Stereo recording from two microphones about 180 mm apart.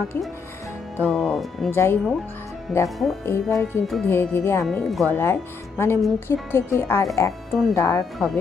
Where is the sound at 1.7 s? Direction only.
15° left (ahead or behind).